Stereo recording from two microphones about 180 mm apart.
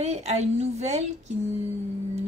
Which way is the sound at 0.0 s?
35° right (ahead or behind).